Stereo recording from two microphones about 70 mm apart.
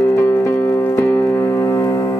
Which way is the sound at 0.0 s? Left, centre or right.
Left.